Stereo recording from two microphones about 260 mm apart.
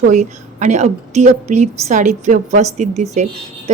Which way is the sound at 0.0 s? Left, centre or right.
Right.